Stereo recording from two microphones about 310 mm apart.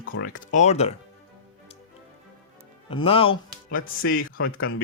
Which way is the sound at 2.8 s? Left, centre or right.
Centre.